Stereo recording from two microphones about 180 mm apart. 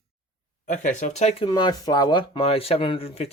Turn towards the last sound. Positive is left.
turn(degrees=30)  # may be behind; listen again after turning